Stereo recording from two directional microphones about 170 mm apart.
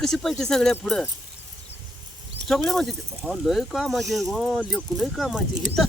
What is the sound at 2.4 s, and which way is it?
Speech, centre (ahead or behind).